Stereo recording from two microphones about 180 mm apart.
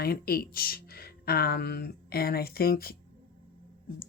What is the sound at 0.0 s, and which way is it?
Speech, 55° left (ahead or behind).